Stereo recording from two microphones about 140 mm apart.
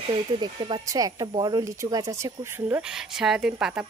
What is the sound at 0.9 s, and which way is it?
Speech, 25° right (ahead or behind).